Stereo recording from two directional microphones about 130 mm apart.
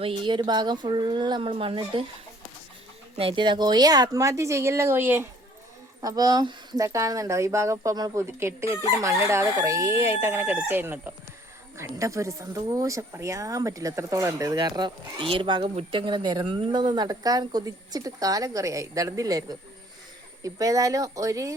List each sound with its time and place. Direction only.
0.0 s speech: 40° right (ahead or behind)
3.2 s speech: 45° right (ahead or behind); by 5.2 s 15° right (ahead or behind)
6.0 s speech: 30° right (ahead or behind)